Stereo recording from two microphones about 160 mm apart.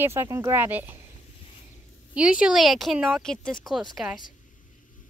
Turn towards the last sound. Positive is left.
turn(degrees=0)  # may be behind; listen again after turning